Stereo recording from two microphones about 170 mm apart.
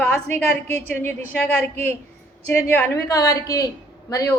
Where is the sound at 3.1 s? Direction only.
20° left (ahead or behind).